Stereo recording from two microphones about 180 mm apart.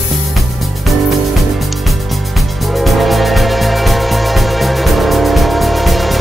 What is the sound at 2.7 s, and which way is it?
Music, centre (ahead or behind).